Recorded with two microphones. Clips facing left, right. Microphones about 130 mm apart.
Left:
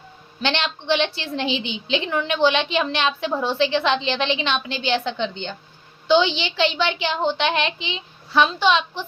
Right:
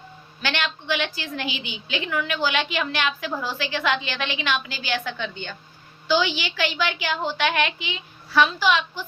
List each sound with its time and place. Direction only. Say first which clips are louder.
0.4 s a woman's voice: left 4 dB; 25° left (ahead or behind)